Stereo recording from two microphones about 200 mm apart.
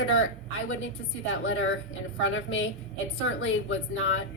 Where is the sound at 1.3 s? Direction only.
75° left (ahead or behind).